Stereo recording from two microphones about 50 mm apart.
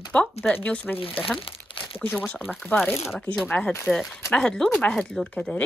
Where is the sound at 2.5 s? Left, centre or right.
Centre.